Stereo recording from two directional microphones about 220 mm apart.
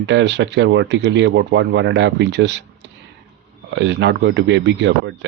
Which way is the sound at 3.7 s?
55° right (ahead or behind).